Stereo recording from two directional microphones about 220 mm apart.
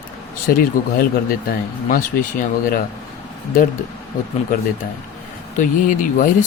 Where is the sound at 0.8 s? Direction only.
40° left (ahead or behind).